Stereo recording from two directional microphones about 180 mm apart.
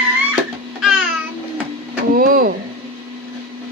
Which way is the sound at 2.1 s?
50° right (ahead or behind).